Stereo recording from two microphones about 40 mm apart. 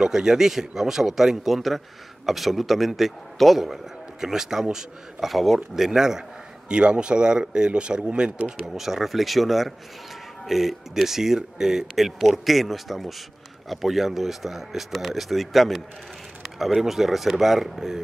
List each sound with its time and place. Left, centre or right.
0.0 s a man's voice: centre
5.3 s a man's voice: centre
5.9 s a man's voice: centre
6.7 s speech: right
8.7 s a man's voice: centre